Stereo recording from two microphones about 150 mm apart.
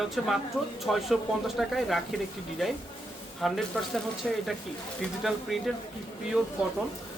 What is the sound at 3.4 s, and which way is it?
Speech, centre (ahead or behind).